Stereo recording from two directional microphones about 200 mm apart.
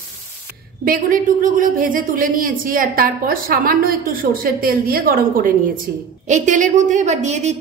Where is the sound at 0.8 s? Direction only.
45° right (ahead or behind).